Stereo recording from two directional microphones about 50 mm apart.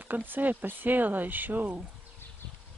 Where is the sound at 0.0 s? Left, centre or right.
Right.